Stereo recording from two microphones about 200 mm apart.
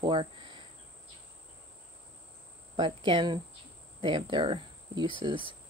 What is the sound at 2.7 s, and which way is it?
Speech, 25° right (ahead or behind).